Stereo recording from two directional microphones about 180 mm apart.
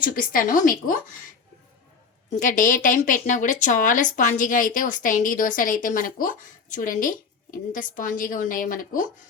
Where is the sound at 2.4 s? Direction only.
45° left (ahead or behind).